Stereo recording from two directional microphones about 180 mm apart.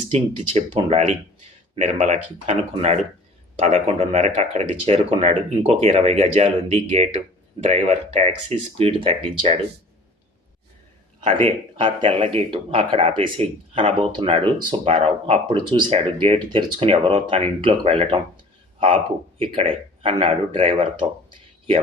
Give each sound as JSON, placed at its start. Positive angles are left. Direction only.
{"t": 0.5, "sound": "speech", "side_deg": -35}
{"t": 11.2, "sound": "speech", "side_deg": -35}
{"t": 19.4, "sound": "speech", "side_deg": -30}